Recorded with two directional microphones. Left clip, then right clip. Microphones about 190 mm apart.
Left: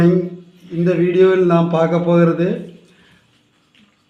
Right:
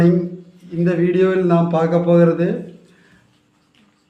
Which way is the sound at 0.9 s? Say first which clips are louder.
Left 3 dB; 45° left (ahead or behind).